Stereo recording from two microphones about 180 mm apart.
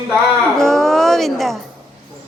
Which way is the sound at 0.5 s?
5° left (ahead or behind).